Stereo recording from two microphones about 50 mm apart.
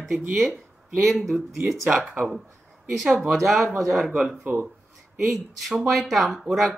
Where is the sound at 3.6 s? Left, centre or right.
Right.